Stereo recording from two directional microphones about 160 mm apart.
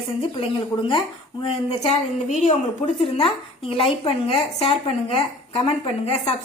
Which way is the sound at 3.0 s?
35° left (ahead or behind).